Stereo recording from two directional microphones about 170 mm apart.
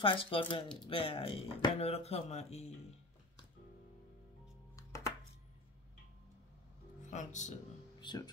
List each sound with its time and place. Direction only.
0.0 s speech: 30° left (ahead or behind)
4.7 s music: 20° left (ahead or behind)
7.0 s speech: 45° left (ahead or behind)